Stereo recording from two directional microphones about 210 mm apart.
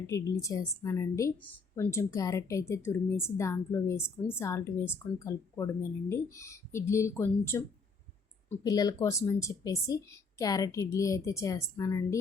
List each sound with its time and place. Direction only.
0.1 s a woman's voice: 15° left (ahead or behind)